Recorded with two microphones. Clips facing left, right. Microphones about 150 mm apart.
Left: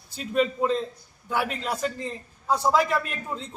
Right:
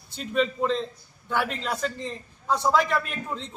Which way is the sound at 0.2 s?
5° left (ahead or behind).